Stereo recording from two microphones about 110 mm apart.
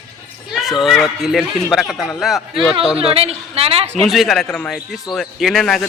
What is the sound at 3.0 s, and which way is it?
A woman's voice, 65° right (ahead or behind).